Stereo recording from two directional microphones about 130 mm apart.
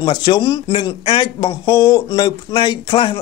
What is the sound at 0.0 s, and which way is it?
Speech, 40° left (ahead or behind).